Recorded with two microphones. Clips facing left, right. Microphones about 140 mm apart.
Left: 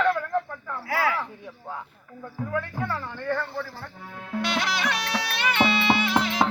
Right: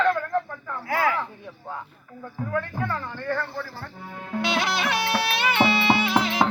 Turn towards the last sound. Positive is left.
turn(degrees=0)  # may be behind; listen again after turning